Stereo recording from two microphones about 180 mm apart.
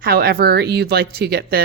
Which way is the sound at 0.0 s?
60° right (ahead or behind).